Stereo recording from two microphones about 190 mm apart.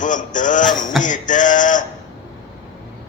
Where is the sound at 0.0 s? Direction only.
40° left (ahead or behind).